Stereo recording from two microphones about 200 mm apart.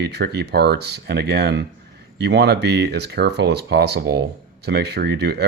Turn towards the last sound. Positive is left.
turn(degrees=-55)  # may be behind; listen again after turning